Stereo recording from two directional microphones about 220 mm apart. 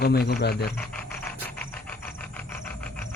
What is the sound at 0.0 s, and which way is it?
Speech, 45° left (ahead or behind).